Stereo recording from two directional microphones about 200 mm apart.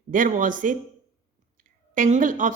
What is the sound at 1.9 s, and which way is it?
Speech, 40° right (ahead or behind).